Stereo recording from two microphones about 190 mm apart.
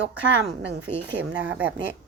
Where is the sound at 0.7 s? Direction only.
65° right (ahead or behind).